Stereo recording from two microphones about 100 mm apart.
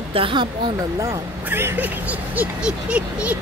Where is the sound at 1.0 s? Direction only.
25° right (ahead or behind).